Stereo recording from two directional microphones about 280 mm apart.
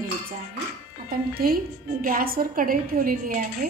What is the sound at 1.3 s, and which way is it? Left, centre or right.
A woman's voice, right.